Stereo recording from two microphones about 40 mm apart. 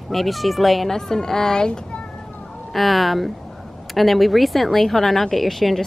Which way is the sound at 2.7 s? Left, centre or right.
Centre.